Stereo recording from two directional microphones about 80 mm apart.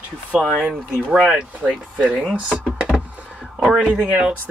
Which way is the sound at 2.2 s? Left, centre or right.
Centre.